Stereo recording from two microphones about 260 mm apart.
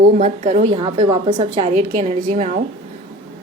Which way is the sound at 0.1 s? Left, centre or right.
Right.